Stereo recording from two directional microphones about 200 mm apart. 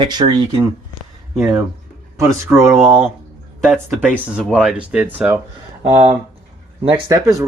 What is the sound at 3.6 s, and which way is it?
Speech, 5° right (ahead or behind).